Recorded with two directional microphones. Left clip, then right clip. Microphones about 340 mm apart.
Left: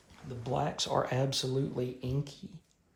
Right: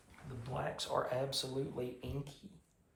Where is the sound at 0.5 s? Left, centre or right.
Centre.